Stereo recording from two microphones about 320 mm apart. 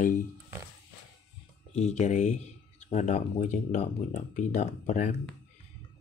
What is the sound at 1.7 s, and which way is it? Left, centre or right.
Speech, left.